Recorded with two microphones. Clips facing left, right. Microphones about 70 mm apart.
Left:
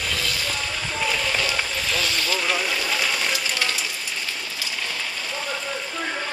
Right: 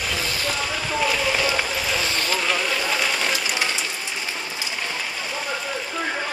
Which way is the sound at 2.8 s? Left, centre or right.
Centre.